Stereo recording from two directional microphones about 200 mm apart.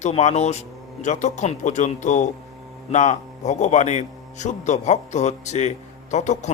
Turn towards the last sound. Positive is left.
turn(degrees=35)  # may be behind; listen again after turning